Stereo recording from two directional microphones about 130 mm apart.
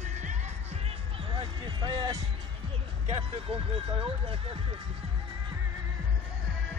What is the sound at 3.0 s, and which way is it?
Speech, 50° right (ahead or behind).